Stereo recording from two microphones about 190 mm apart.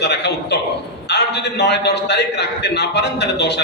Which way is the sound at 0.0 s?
60° left (ahead or behind).